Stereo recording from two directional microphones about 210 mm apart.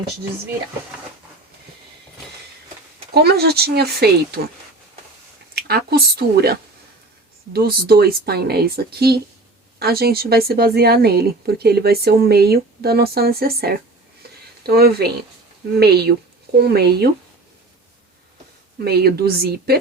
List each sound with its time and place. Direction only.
3.2 s a woman's voice: 50° right (ahead or behind)
5.5 s a woman's voice: 50° right (ahead or behind)
18.9 s a woman's voice: 50° right (ahead or behind)